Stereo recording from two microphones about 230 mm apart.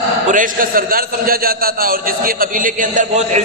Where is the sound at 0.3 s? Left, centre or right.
Right.